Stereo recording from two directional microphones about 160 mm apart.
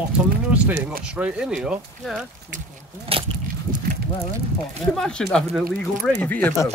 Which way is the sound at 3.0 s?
35° right (ahead or behind).